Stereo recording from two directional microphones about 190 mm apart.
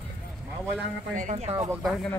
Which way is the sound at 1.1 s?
35° right (ahead or behind).